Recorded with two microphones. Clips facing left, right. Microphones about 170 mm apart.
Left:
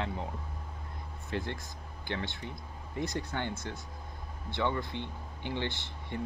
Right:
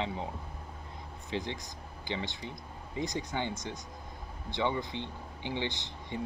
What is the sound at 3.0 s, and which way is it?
Speech, 15° right (ahead or behind).